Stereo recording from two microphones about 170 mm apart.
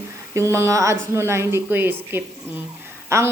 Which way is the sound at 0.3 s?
15° right (ahead or behind).